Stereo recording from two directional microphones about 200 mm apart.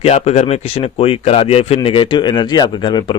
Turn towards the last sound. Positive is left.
turn(degrees=20)  # may be behind; listen again after turning